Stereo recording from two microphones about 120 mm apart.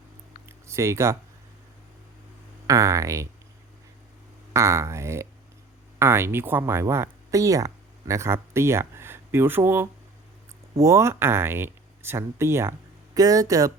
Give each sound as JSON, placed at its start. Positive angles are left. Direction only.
{"t": 0.4, "sound": "a sound", "side_deg": -25}
{"t": 2.6, "sound": "speech", "side_deg": -25}
{"t": 4.5, "sound": "speech", "side_deg": -25}